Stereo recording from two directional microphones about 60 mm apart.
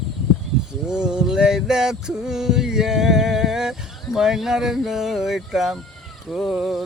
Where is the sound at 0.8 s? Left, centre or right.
Centre.